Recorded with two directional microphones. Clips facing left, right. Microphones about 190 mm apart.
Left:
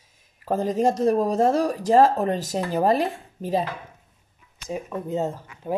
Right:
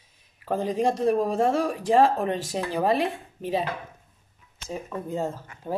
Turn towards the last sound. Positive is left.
turn(degrees=20)  # may be behind; listen again after turning